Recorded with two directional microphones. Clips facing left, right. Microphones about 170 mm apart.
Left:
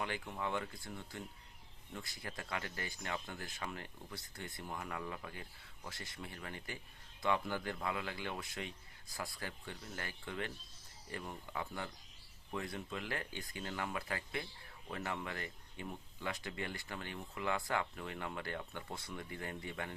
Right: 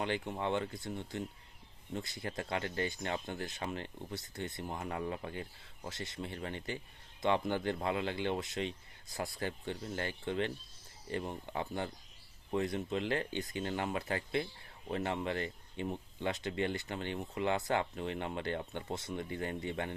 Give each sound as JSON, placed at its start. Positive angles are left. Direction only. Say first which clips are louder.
{"t": 0.0, "sound": "speech", "louder": "right 5 dB", "side_deg": -25}